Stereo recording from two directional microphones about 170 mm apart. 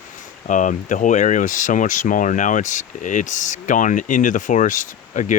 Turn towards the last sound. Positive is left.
turn(degrees=50)  # may be behind; listen again after turning